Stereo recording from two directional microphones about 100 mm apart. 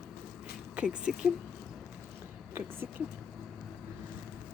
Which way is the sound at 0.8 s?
10° right (ahead or behind).